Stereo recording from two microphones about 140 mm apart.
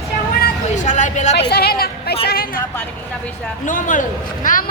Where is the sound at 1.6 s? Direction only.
90° left.